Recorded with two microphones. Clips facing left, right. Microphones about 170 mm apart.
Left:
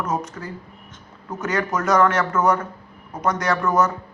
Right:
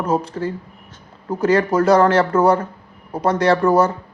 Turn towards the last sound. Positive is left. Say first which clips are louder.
# right 6 dB
turn(degrees=-30)  # may be behind; listen again after turning